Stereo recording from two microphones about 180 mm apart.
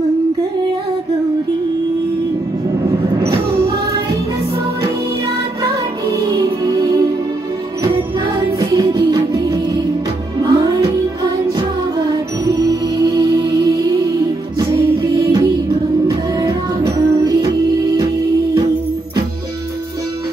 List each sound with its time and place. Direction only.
6.3 s music: 20° right (ahead or behind)
8.5 s music: 20° right (ahead or behind)
10.4 s music: 20° right (ahead or behind)
17.9 s music: 25° right (ahead or behind)